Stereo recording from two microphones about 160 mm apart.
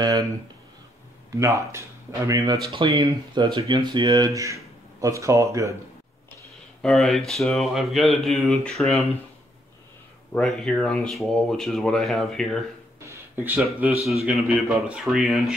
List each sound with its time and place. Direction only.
0.0 s speech: 20° right (ahead or behind)
1.3 s speech: 20° right (ahead or behind)
6.8 s speech: 5° left (ahead or behind)
10.3 s speech: 5° left (ahead or behind)
13.0 s a sound: 15° right (ahead or behind)
13.6 s speech: 5° right (ahead or behind)